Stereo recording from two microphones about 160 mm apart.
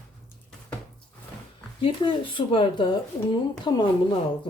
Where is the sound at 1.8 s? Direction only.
30° left (ahead or behind).